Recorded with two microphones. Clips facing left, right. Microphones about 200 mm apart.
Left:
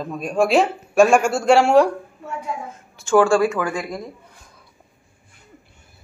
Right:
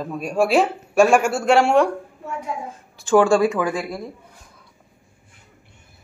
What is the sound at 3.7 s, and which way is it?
Speech, 5° right (ahead or behind).